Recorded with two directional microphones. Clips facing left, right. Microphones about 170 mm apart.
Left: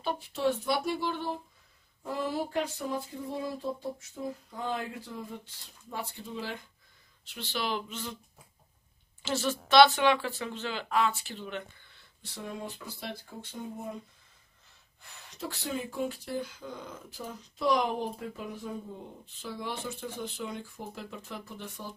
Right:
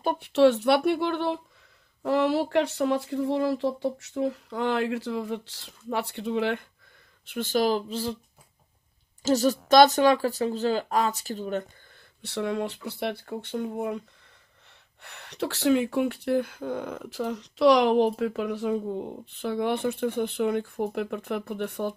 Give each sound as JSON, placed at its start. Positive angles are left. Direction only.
{"t": 0.0, "sound": "speech", "side_deg": -50}
{"t": 0.3, "sound": "speech", "side_deg": -80}
{"t": 7.2, "sound": "speech", "side_deg": -50}
{"t": 9.2, "sound": "speech", "side_deg": -40}
{"t": 12.2, "sound": "speech", "side_deg": -75}